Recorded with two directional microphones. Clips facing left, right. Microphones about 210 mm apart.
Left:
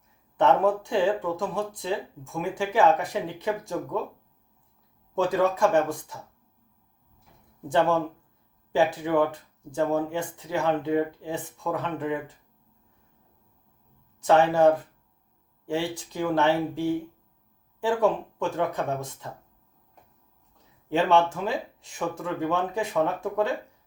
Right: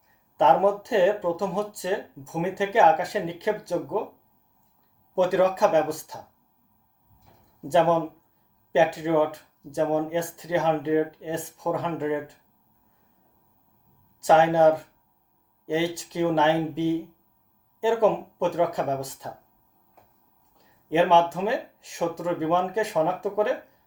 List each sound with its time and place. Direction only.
0.3 s speech: 15° right (ahead or behind)
5.1 s speech: 15° right (ahead or behind)
7.7 s speech: 15° right (ahead or behind)
14.3 s speech: 15° right (ahead or behind)
20.9 s speech: 15° right (ahead or behind)